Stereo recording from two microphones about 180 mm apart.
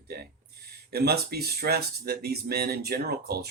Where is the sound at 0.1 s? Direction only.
60° right (ahead or behind).